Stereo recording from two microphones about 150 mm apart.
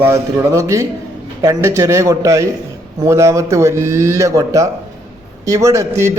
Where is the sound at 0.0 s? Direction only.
20° right (ahead or behind).